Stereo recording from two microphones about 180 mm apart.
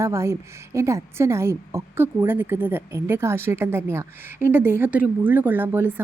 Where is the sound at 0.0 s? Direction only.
15° right (ahead or behind).